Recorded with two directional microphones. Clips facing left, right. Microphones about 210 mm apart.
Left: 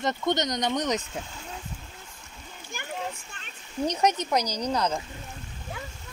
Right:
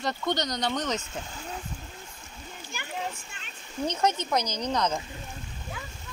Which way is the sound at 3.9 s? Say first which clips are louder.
Left 2 dB; 15° left (ahead or behind).